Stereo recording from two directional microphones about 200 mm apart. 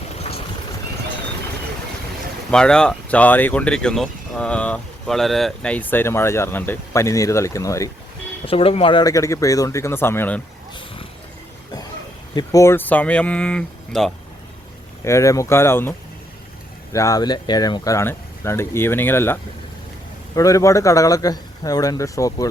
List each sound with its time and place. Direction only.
0.2 s vehicle: 30° left (ahead or behind)
2.5 s speech: 5° left (ahead or behind)
8.4 s speech: 30° left (ahead or behind); by 10.4 s 10° left (ahead or behind)
12.3 s speech: 20° left (ahead or behind)
15.0 s speech: 15° left (ahead or behind)